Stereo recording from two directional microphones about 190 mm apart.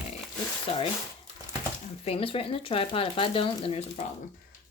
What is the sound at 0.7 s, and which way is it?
Speech, 30° left (ahead or behind).